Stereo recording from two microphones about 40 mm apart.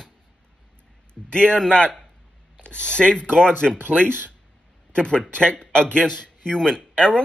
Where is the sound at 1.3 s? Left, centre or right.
Left.